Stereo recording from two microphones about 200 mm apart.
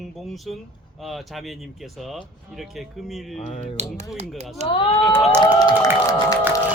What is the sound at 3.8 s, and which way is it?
Speech, 35° right (ahead or behind).